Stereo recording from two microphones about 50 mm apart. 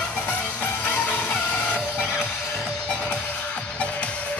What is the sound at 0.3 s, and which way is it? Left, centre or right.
Music, left.